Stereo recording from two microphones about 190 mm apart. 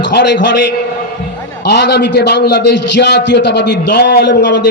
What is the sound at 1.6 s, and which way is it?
A man's voice, 65° left (ahead or behind).